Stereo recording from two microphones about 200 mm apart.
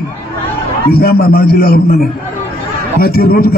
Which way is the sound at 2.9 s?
50° left (ahead or behind).